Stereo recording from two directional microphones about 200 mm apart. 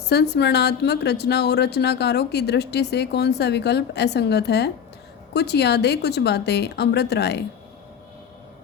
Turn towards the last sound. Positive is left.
turn(degrees=55)  # may be behind; listen again after turning